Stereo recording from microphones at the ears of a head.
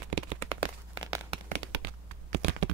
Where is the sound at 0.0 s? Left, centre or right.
Right.